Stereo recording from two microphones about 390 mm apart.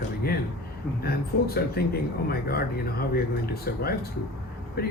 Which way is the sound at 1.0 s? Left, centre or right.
Left.